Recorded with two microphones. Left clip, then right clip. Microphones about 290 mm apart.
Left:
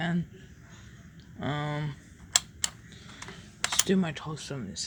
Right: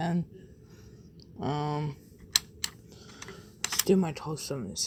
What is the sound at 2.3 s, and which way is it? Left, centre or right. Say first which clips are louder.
Typing: even; centre.